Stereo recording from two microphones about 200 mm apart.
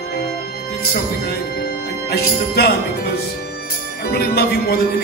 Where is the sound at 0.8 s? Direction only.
50° left (ahead or behind).